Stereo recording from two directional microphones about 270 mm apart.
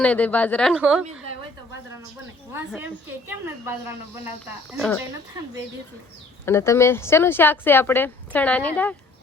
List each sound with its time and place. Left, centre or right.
0.0 s speech: centre
2.7 s a woman's voice: centre
6.4 s a woman's voice: centre